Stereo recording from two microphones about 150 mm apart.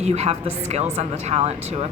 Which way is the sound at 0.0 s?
45° right (ahead or behind).